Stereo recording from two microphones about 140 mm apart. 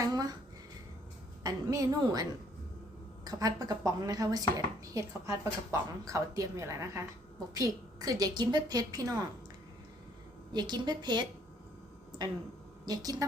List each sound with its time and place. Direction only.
0.0 s a sound: 25° right (ahead or behind)
1.5 s a woman's voice: 25° right (ahead or behind)
3.2 s speech: 25° right (ahead or behind)
10.5 s a woman's voice: 30° right (ahead or behind)
12.8 s a woman's voice: 25° right (ahead or behind)